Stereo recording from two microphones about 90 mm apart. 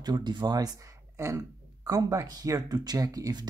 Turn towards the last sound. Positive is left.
turn(degrees=-45)  # may be behind; listen again after turning